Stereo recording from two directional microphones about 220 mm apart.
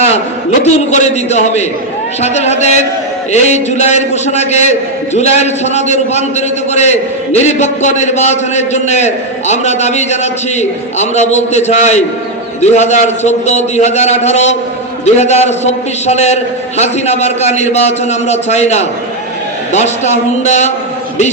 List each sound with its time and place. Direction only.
0.6 s a man's voice: 30° left (ahead or behind)